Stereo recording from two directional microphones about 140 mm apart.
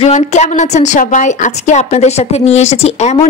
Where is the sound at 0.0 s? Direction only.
55° left (ahead or behind).